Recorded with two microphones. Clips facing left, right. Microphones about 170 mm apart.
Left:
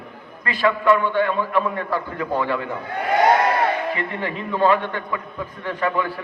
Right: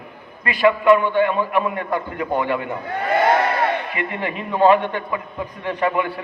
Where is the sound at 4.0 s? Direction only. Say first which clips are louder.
Right 1 dB; 20° right (ahead or behind).